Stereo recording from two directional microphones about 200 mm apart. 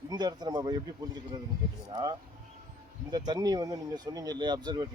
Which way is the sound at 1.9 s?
20° right (ahead or behind).